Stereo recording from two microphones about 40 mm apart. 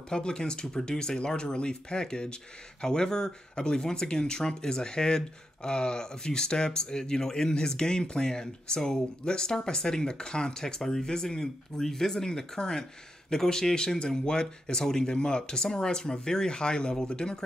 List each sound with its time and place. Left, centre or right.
0.1 s speech: centre